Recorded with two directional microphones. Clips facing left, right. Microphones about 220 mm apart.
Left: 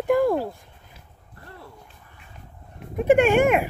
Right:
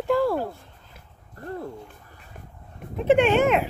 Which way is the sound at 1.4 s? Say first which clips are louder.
Right 11 dB; 45° right (ahead or behind).